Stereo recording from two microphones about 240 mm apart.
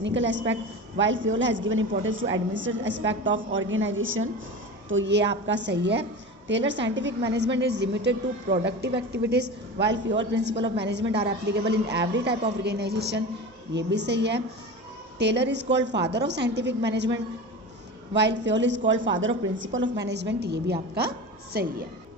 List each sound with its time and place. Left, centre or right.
0.0 s a woman's voice: right